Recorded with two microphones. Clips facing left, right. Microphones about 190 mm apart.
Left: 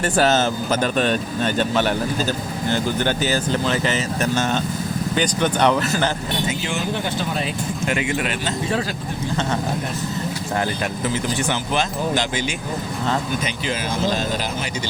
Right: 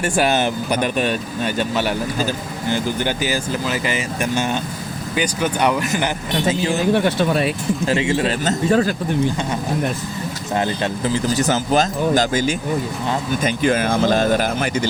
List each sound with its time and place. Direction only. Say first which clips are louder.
0.0 s speech: even; 15° right (ahead or behind)
6.9 s speech: right 7 dB; 60° right (ahead or behind)
7.9 s speech: right 4 dB; 30° right (ahead or behind)
8.4 s speech: right 9 dB; 45° right (ahead or behind)
10.6 s speech: right 4 dB; 30° right (ahead or behind); by 14.7 s 55° right (ahead or behind)